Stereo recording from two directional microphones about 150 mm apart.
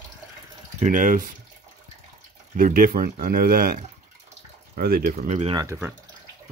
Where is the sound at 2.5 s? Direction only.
70° right (ahead or behind).